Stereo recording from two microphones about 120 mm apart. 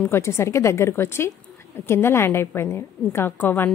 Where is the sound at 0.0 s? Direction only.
20° left (ahead or behind).